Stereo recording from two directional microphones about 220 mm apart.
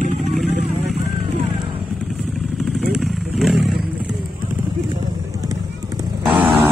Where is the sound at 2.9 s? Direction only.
Centre (ahead or behind).